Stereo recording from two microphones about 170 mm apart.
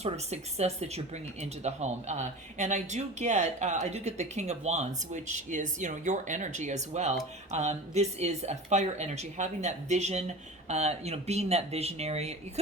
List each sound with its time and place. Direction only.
0.0 s speech: 40° right (ahead or behind)